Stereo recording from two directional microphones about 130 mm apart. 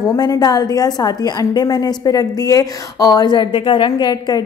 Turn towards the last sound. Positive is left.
turn(degrees=35)  # may be behind; listen again after turning